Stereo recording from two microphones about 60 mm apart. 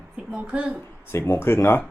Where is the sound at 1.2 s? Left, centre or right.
Left.